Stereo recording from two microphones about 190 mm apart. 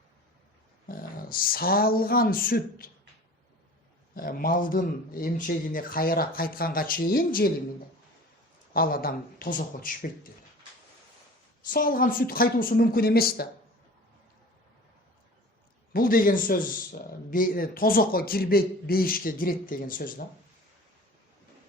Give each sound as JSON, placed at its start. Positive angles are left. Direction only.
{"t": 0.9, "sound": "speech", "side_deg": 50}
{"t": 4.1, "sound": "a man's voice", "side_deg": 50}
{"t": 8.7, "sound": "a man's voice", "side_deg": 50}
{"t": 11.7, "sound": "a man's voice", "side_deg": 50}
{"t": 15.9, "sound": "a man's voice", "side_deg": 50}